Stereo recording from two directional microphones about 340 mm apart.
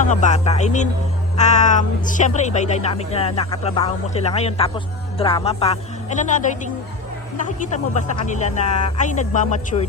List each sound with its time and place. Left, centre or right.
0.0 s a woman's voice: left